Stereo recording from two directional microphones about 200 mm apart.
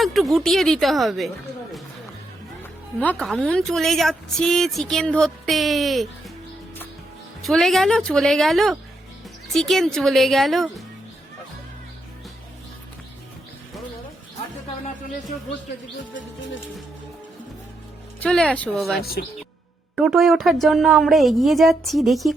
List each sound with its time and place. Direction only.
0.0 s a woman's voice: centre (ahead or behind)
3.0 s a woman's voice: 5° left (ahead or behind)
7.4 s a woman's voice: centre (ahead or behind)
18.2 s a woman's voice: 5° left (ahead or behind)
19.2 s speech: 50° left (ahead or behind)
20.0 s a woman's voice: centre (ahead or behind)